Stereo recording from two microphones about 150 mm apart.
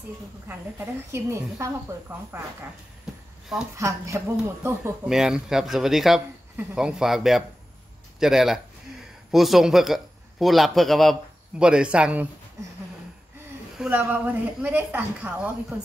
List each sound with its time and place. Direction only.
0.5 s speech: 15° right (ahead or behind)
3.7 s speech: 20° right (ahead or behind)
5.0 s a man's voice: 5° right (ahead or behind)
13.7 s speech: 10° right (ahead or behind)